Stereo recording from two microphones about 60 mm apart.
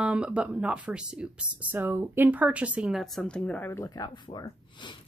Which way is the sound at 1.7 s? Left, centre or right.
Right.